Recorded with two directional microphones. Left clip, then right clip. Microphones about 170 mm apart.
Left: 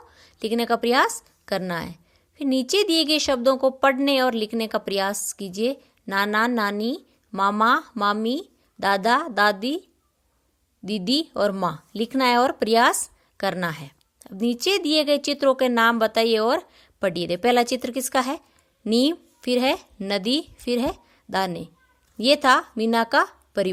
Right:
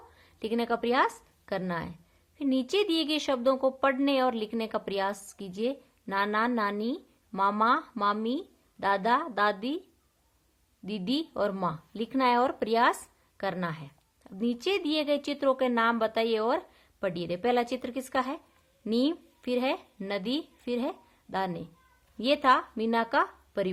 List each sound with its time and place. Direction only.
0.2 s a woman's voice: 30° left (ahead or behind)
10.8 s a woman's voice: 30° left (ahead or behind)